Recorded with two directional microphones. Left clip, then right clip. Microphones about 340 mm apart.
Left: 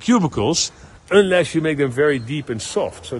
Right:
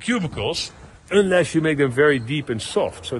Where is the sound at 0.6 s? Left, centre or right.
Left.